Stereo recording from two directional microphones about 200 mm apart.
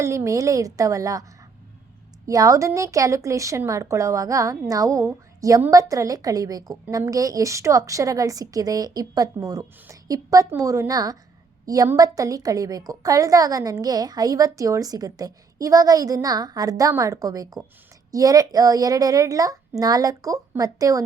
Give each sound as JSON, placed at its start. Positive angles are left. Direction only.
{"t": 0.0, "sound": "a woman's voice", "side_deg": -15}
{"t": 2.2, "sound": "a woman's voice", "side_deg": -15}